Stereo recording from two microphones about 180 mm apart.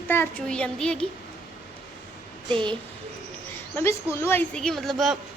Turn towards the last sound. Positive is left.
turn(degrees=0)  # may be behind; listen again after turning